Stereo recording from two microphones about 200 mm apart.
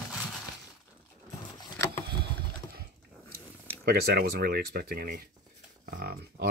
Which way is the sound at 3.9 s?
50° right (ahead or behind).